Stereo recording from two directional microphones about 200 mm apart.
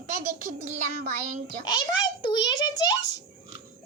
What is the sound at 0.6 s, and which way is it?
Child singing, 40° right (ahead or behind).